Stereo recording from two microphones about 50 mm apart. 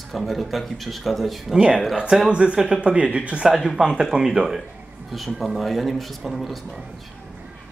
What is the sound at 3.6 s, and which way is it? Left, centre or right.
Speech, centre.